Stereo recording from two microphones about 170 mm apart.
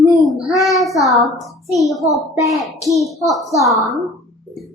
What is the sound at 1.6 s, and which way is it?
Speech, 20° right (ahead or behind).